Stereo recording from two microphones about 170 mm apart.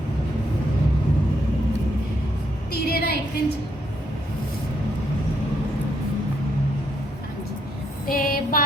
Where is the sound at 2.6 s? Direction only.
70° left (ahead or behind).